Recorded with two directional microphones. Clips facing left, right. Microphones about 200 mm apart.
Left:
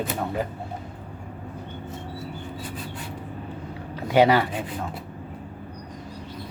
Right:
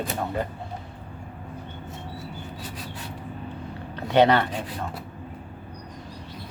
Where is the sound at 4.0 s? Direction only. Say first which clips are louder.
Left 1 dB; 5° left (ahead or behind).